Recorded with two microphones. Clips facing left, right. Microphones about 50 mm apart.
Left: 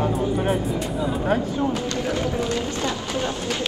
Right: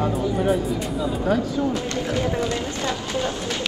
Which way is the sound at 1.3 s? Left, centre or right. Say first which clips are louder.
Right 1 dB; left.